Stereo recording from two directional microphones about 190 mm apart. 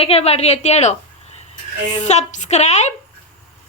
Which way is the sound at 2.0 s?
35° left (ahead or behind).